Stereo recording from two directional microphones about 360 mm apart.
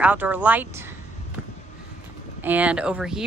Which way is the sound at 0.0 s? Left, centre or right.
Centre.